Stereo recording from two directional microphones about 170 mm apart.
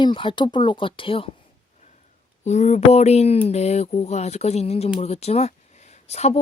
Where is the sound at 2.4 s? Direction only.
40° left (ahead or behind).